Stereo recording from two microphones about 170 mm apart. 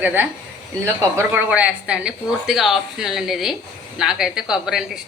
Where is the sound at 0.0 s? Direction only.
10° right (ahead or behind).